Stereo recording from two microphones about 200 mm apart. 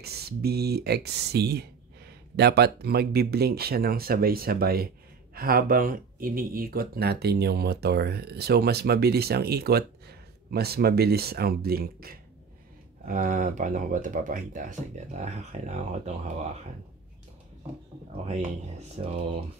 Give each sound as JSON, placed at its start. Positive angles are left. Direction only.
{"t": 0.0, "sound": "speech", "side_deg": -50}
{"t": 18.1, "sound": "speech", "side_deg": -30}